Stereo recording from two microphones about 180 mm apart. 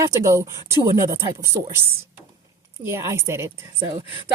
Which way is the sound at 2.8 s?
15° right (ahead or behind).